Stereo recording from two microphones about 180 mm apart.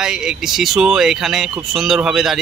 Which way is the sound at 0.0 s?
5° right (ahead or behind).